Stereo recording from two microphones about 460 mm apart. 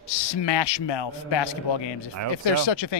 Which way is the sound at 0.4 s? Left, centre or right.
Left.